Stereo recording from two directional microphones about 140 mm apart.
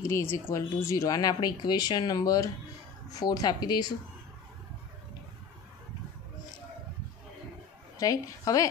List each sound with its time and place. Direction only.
0.1 s speech: 15° left (ahead or behind)
8.0 s speech: 25° left (ahead or behind)